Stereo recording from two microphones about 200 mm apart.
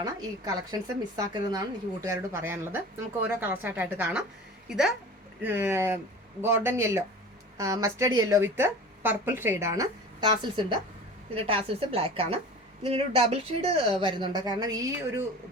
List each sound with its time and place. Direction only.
0.0 s a woman's voice: 20° right (ahead or behind)